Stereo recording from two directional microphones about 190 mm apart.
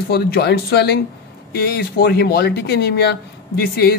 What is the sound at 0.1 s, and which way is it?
Speech, 55° left (ahead or behind).